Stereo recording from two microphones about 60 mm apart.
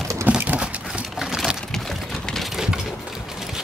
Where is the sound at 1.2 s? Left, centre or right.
Centre.